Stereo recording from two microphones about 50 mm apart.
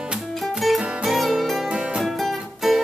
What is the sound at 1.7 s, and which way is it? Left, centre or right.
Music, centre.